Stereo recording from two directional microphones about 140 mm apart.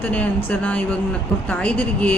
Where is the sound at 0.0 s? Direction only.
10° left (ahead or behind).